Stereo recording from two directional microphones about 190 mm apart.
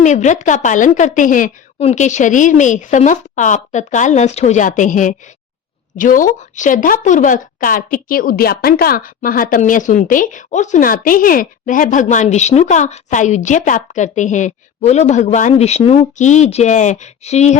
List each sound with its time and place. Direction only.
0.0 s a woman's voice: 40° left (ahead or behind)